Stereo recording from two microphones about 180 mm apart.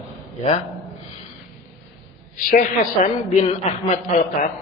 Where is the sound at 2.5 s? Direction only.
45° left (ahead or behind).